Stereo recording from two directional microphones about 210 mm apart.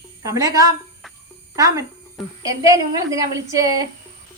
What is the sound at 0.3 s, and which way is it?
A woman's voice, 15° right (ahead or behind).